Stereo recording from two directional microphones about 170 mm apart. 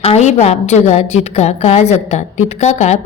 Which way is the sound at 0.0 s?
40° left (ahead or behind).